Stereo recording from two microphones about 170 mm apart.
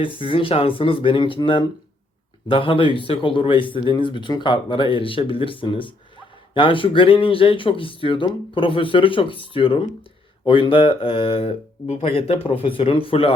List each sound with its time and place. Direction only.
0.0 s speech: 30° left (ahead or behind)